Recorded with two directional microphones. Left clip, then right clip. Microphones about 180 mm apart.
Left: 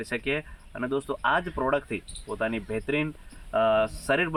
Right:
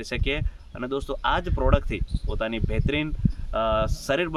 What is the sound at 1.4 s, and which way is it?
Speech, 25° right (ahead or behind).